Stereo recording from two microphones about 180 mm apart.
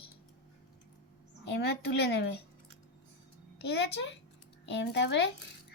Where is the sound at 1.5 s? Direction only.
65° left (ahead or behind).